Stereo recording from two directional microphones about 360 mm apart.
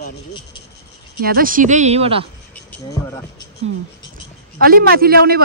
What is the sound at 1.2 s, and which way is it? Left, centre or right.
A man's voice, right.